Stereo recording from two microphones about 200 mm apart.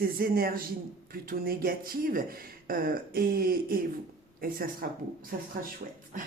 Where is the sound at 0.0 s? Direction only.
50° right (ahead or behind).